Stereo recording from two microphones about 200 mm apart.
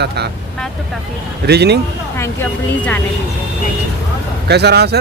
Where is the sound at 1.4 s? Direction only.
55° right (ahead or behind).